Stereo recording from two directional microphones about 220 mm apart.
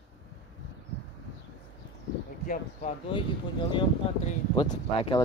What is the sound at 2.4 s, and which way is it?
Speech, 35° left (ahead or behind).